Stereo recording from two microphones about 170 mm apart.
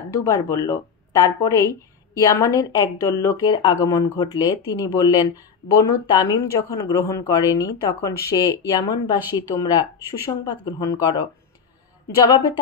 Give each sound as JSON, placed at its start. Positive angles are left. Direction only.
{"t": 0.1, "sound": "speech", "side_deg": 20}